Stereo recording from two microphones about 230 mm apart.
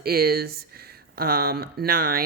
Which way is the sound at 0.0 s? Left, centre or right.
Right.